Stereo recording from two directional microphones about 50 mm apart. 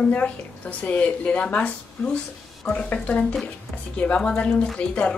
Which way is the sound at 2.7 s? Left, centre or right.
Left.